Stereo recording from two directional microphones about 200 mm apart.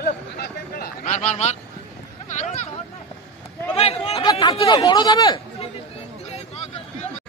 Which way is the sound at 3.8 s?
30° left (ahead or behind).